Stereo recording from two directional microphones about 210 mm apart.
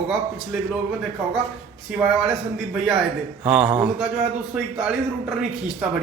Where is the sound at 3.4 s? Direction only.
5° right (ahead or behind).